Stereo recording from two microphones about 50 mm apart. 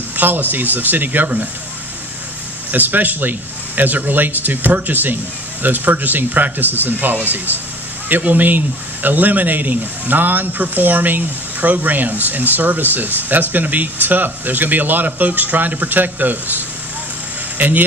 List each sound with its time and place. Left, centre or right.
0.1 s speech: right
2.7 s speech: right